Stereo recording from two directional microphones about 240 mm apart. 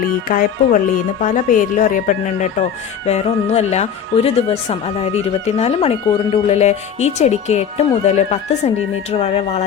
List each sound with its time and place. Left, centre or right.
0.0 s speech: left